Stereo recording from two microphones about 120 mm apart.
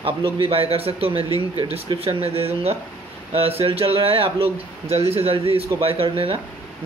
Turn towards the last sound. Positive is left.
turn(degrees=-50)  # may be behind; listen again after turning